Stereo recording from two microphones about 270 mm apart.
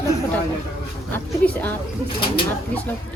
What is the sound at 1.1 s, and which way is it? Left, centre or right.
Speech, centre.